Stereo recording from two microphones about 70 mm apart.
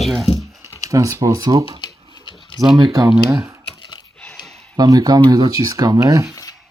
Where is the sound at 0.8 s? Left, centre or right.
Right.